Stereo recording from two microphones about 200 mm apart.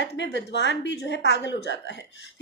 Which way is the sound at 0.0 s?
60° left (ahead or behind).